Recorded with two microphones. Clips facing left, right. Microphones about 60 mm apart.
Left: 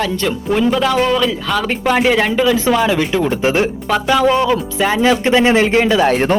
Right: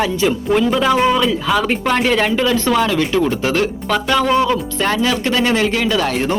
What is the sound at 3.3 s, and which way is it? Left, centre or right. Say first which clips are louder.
Speech: left 2 dB; left.